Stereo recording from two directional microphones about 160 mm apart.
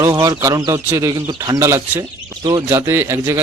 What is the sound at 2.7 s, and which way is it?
Speech, 15° right (ahead or behind).